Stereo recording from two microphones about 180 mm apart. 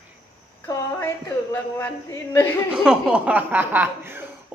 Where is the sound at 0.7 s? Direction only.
15° left (ahead or behind).